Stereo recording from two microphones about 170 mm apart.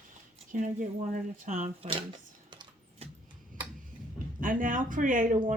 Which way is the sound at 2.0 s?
25° right (ahead or behind).